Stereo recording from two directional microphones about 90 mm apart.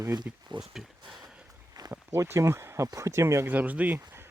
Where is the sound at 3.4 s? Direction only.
20° right (ahead or behind).